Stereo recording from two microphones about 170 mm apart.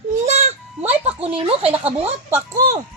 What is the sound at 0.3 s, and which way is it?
Baby cry, 40° right (ahead or behind).